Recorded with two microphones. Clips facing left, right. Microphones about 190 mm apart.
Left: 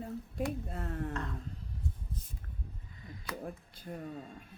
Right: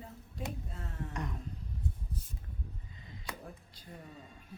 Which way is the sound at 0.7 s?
55° left (ahead or behind).